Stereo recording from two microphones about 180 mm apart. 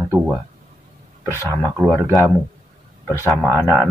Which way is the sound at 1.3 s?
15° left (ahead or behind).